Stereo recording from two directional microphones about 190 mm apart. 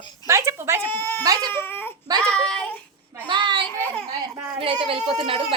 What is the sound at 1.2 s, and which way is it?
Speech, 20° right (ahead or behind).